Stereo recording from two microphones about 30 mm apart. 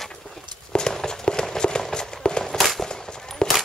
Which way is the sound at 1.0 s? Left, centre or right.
Left.